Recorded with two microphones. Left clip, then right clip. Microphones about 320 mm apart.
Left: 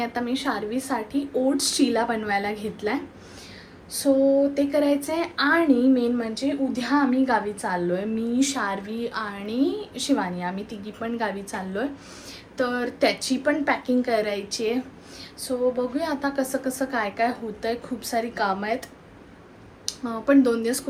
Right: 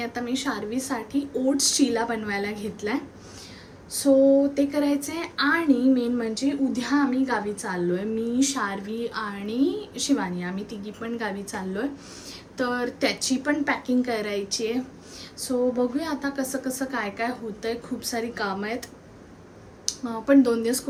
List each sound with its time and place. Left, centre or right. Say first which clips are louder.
0.0 s a woman's voice: left 2 dB; centre
4.1 s a sound: right 2 dB; centre
4.5 s a woman's voice: left 2 dB; centre